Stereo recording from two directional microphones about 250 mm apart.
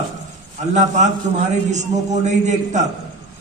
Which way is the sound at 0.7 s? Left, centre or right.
Right.